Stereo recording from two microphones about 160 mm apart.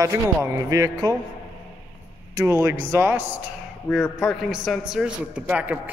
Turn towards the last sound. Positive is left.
turn(degrees=-10)  # may be behind; listen again after turning